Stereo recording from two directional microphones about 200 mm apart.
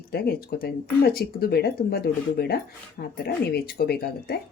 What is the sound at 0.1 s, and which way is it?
Speech, 50° left (ahead or behind).